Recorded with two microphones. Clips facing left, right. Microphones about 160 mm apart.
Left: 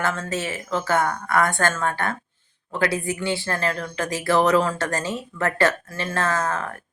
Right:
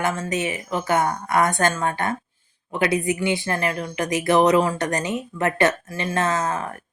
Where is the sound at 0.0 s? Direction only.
15° right (ahead or behind).